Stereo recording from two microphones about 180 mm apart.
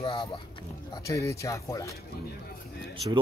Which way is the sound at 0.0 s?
30° left (ahead or behind).